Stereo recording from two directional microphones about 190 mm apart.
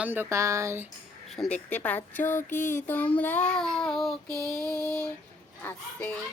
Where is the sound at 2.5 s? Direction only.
40° left (ahead or behind).